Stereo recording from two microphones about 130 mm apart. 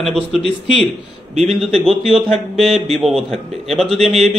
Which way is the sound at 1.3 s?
60° right (ahead or behind).